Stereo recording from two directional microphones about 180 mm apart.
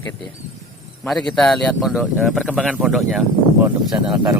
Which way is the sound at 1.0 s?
5° left (ahead or behind).